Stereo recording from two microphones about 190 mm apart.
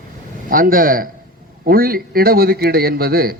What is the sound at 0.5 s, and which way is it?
A man's voice, 50° right (ahead or behind).